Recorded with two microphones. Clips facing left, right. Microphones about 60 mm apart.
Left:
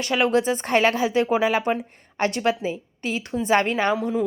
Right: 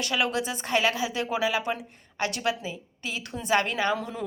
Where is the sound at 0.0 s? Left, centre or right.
Left.